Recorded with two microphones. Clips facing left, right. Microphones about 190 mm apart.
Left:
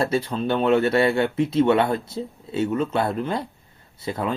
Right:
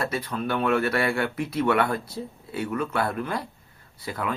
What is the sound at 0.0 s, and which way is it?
Speech, 25° left (ahead or behind).